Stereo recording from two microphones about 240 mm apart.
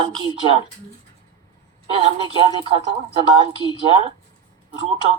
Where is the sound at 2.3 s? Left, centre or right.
Left.